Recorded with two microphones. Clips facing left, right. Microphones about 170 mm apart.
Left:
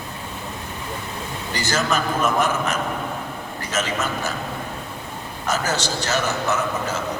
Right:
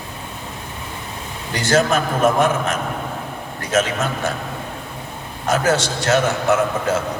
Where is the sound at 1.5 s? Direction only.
55° right (ahead or behind).